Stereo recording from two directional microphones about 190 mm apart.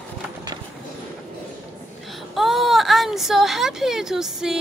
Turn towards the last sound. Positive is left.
turn(degrees=0)  # may be behind; listen again after turning